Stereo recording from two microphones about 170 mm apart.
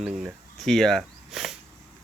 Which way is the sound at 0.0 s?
5° right (ahead or behind).